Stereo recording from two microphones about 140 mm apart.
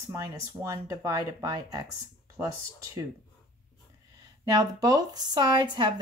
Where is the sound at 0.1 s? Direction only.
20° right (ahead or behind).